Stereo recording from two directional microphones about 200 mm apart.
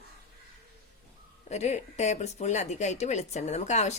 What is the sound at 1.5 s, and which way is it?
Speech, 35° left (ahead or behind).